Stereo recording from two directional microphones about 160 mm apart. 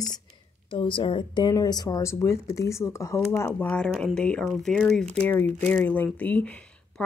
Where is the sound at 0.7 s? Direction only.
30° left (ahead or behind).